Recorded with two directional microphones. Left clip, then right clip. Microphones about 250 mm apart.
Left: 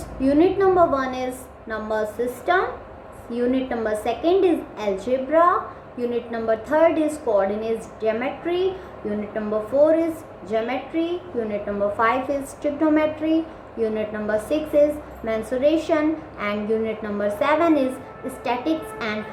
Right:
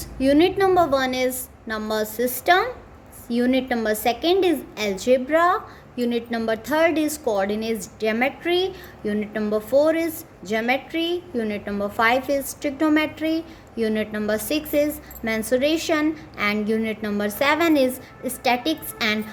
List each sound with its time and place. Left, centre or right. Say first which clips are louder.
0.2 s a woman's voice: even; right